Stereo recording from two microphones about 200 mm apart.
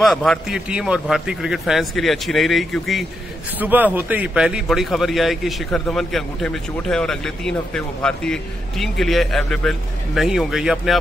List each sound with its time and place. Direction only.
0.0 s a man's voice: centre (ahead or behind)